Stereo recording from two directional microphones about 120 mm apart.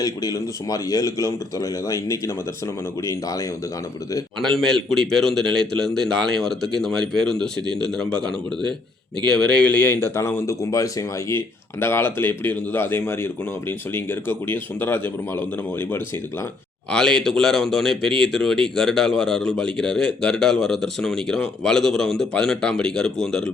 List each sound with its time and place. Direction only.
0.0 s a man's voice: 30° left (ahead or behind)
4.4 s speech: 5° left (ahead or behind)
16.9 s speech: 5° left (ahead or behind)